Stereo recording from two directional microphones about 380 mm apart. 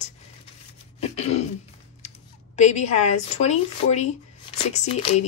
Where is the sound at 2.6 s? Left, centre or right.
Centre.